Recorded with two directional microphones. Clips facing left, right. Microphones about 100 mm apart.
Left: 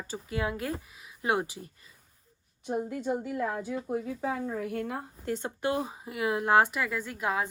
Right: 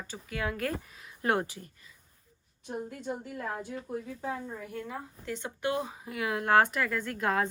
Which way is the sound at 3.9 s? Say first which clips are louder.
Left 3 dB; 85° left.